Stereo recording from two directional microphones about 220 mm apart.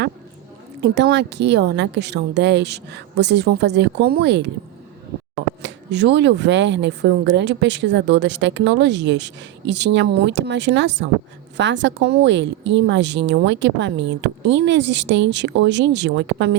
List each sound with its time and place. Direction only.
0.8 s speech: 50° right (ahead or behind)
5.6 s speech: 50° right (ahead or behind)